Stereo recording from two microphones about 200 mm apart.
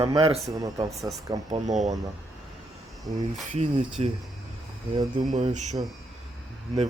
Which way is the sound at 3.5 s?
35° right (ahead or behind).